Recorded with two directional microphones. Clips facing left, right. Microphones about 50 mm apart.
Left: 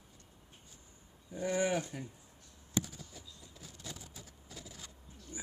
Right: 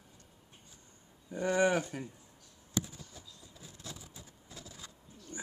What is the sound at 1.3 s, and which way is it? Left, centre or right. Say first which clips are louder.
Speech: right 4 dB; right.